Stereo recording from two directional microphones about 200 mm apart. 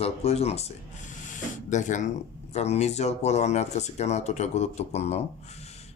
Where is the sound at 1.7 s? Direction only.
35° left (ahead or behind).